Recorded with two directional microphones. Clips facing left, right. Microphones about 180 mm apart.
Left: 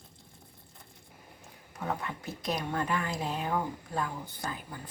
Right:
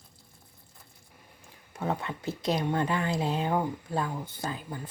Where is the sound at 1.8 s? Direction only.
25° right (ahead or behind).